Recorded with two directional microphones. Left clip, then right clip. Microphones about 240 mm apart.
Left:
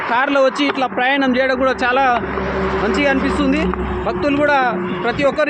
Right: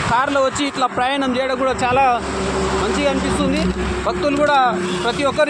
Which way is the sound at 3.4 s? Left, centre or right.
Left.